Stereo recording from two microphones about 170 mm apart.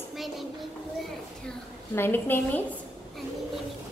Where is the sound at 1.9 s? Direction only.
15° left (ahead or behind).